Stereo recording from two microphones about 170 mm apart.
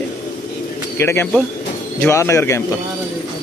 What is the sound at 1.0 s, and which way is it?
Speech, 15° left (ahead or behind).